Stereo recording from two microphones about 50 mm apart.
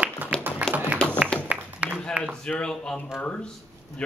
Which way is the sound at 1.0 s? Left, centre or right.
Centre.